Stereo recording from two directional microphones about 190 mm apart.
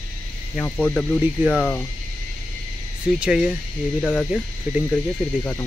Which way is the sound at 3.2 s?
5° right (ahead or behind).